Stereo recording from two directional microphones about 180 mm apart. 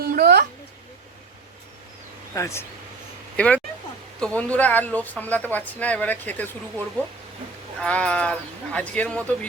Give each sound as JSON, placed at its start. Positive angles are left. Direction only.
{"t": 0.0, "sound": "a sound", "side_deg": -60}
{"t": 2.3, "sound": "speech", "side_deg": 15}
{"t": 7.8, "sound": "speech", "side_deg": 5}